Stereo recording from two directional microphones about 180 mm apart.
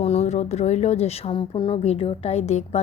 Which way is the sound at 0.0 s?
35° left (ahead or behind).